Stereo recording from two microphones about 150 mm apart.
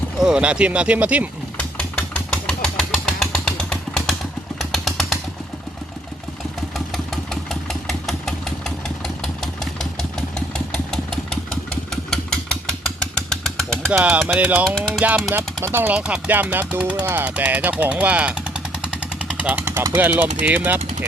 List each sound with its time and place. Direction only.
0.2 s speech: 5° right (ahead or behind)
1.5 s engine: 10° left (ahead or behind)
4.7 s vehicle: centre (ahead or behind)
6.7 s engine: centre (ahead or behind)
13.9 s speech: 10° right (ahead or behind)
14.8 s speech: 5° left (ahead or behind)
15.0 s speech: 15° right (ahead or behind)